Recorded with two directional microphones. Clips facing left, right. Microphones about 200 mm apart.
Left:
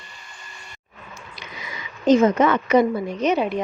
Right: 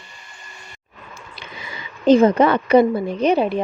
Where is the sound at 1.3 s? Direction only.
30° right (ahead or behind).